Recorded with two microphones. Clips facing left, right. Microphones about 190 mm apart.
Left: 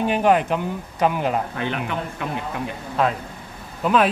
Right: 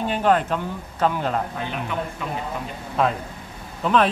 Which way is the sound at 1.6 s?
65° left (ahead or behind).